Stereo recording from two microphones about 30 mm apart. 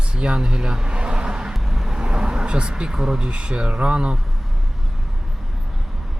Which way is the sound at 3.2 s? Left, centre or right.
Right.